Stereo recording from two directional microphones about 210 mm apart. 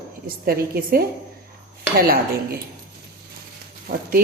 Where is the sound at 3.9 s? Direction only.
50° right (ahead or behind).